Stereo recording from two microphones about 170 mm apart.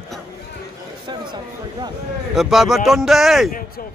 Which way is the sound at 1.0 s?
25° right (ahead or behind).